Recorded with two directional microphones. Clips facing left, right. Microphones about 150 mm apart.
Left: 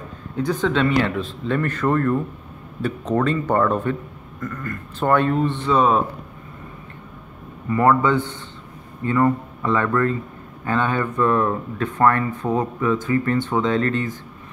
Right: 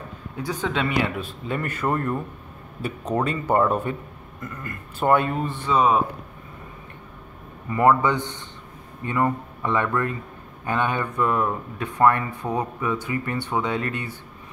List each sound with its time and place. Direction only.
0.4 s speech: 10° right (ahead or behind)
7.7 s speech: 15° right (ahead or behind)